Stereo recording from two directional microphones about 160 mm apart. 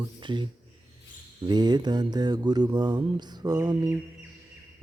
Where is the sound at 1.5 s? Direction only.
25° right (ahead or behind).